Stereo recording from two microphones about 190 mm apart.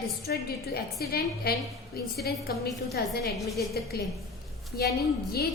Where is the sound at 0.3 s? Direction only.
55° left (ahead or behind).